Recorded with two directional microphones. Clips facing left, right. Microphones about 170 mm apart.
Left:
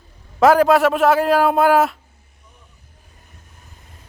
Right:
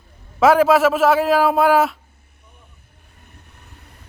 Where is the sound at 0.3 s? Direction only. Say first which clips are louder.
Left 1 dB; centre (ahead or behind).